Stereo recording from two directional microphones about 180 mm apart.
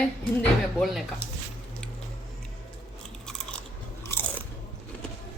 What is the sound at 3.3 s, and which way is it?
Biting, 5° left (ahead or behind).